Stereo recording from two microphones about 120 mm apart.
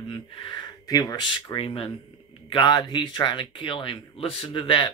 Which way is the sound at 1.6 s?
55° left (ahead or behind).